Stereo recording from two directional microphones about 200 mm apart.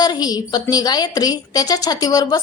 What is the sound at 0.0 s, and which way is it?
A woman's voice, 20° left (ahead or behind).